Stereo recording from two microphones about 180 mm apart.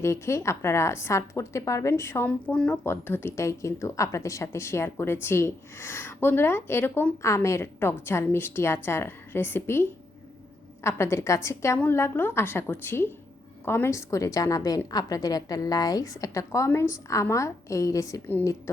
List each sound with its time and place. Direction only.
0.0 s a woman's voice: 15° left (ahead or behind)
10.8 s a woman's voice: 15° left (ahead or behind)